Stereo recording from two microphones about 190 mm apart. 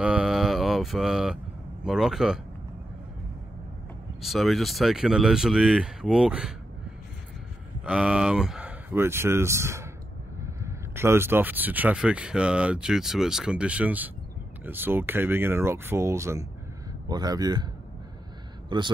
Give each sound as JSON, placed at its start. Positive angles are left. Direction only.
{"t": 0.0, "sound": "mantra", "side_deg": -5}
{"t": 1.9, "sound": "speech", "side_deg": 0}
{"t": 4.2, "sound": "speech", "side_deg": 0}
{"t": 7.8, "sound": "a man's voice", "side_deg": -5}
{"t": 18.7, "sound": "a man's voice", "side_deg": -25}